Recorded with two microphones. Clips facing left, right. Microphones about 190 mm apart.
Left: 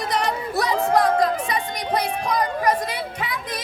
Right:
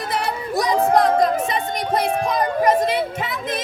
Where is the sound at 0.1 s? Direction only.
10° right (ahead or behind).